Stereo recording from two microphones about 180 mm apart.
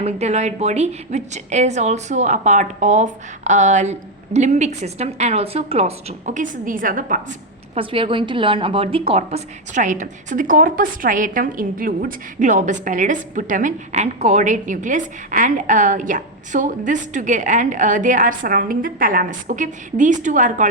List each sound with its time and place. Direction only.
0.0 s a woman's voice: 35° right (ahead or behind)
7.8 s a woman's voice: 30° right (ahead or behind)